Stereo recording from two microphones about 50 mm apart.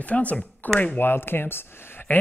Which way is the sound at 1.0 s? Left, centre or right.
Left.